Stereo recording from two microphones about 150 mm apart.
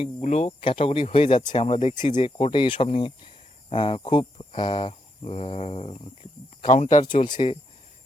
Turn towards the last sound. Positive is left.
turn(degrees=35)  # may be behind; listen again after turning